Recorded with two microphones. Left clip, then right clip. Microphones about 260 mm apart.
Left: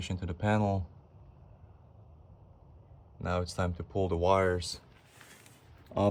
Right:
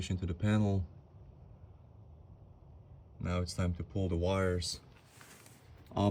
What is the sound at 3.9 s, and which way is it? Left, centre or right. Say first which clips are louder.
Speech: left 8 dB; centre.